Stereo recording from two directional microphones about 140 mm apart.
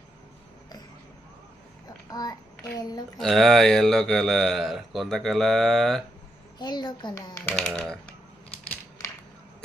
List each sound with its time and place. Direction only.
2.0 s child singing: 25° left (ahead or behind)
3.2 s speech: centre (ahead or behind)
6.6 s speech: 30° left (ahead or behind)
7.5 s speech: 5° left (ahead or behind)